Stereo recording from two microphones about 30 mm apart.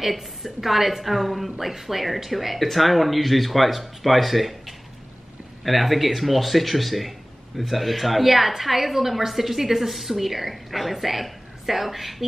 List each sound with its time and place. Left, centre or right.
0.0 s speech: centre